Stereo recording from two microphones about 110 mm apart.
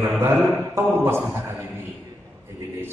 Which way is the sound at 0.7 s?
20° right (ahead or behind).